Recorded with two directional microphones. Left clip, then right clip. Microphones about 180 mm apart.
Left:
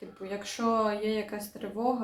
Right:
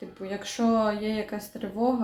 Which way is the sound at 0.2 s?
15° right (ahead or behind).